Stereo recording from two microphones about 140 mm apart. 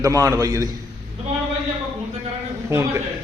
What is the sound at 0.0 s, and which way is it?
Speech, 25° right (ahead or behind).